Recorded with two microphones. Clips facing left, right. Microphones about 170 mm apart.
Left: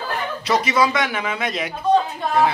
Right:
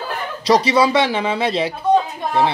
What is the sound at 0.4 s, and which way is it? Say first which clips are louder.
A man's voice: right 5 dB; 35° right (ahead or behind).